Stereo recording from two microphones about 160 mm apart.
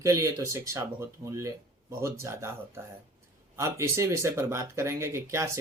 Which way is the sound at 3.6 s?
15° right (ahead or behind).